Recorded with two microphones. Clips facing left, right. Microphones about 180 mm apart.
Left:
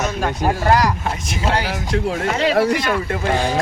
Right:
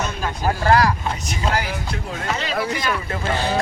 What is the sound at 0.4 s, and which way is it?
Speech, 20° left (ahead or behind).